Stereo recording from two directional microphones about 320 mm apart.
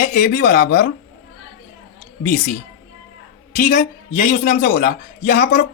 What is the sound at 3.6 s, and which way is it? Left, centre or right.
Speech, left.